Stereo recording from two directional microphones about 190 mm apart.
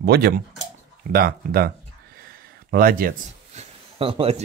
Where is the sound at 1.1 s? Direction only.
50° right (ahead or behind).